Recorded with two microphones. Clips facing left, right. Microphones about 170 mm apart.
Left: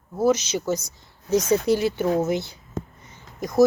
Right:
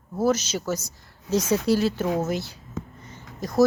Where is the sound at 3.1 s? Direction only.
15° left (ahead or behind).